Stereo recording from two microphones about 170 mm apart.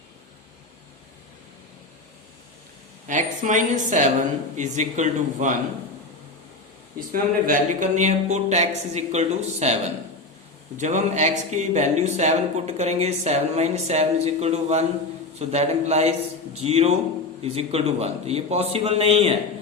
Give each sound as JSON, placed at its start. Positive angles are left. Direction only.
{"t": 3.1, "sound": "a woman's voice", "side_deg": -50}
{"t": 7.1, "sound": "speech", "side_deg": -55}